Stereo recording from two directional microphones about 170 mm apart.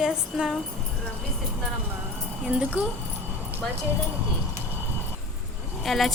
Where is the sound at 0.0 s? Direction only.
5° right (ahead or behind).